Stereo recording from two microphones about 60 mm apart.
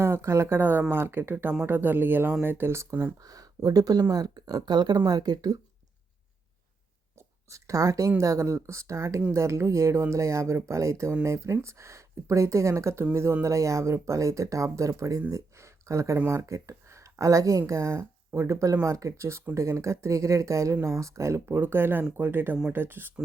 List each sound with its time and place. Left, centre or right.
0.0 s speech: right
0.6 s speech: right
3.2 s speech: right
7.2 s speech: right
8.2 s speech: right